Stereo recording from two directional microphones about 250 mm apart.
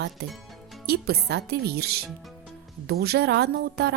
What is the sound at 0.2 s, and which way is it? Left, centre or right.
A woman's voice, right.